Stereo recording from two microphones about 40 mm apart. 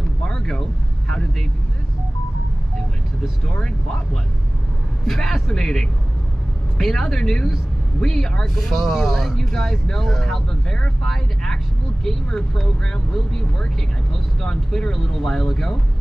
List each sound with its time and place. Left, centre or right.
0.2 s vehicle: centre
3.4 s speech: left
5.0 s speech: centre
8.7 s speech: centre
14.4 s speech: centre